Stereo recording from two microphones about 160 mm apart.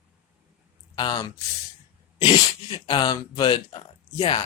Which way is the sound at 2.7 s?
30° left (ahead or behind).